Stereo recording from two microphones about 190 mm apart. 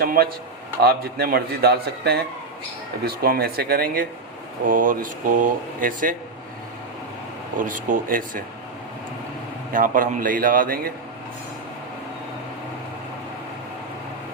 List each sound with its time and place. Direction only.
0.0 s a man's voice: 50° right (ahead or behind)
7.7 s a man's voice: 45° right (ahead or behind)
9.7 s a man's voice: 45° right (ahead or behind)